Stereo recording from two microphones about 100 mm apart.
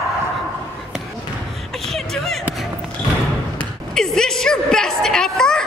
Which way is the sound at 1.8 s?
5° left (ahead or behind).